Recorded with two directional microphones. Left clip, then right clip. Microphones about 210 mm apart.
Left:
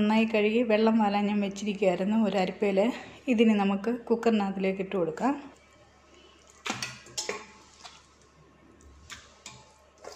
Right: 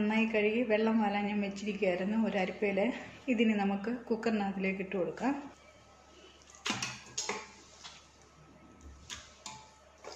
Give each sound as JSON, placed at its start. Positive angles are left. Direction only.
{"t": 0.0, "sound": "a woman's voice", "side_deg": 45}